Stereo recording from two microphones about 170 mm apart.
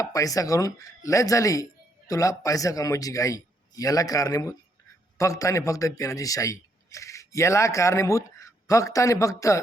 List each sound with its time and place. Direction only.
0.0 s a man's voice: 20° left (ahead or behind)